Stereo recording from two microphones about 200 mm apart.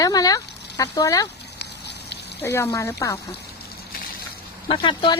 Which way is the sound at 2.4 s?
10° left (ahead or behind).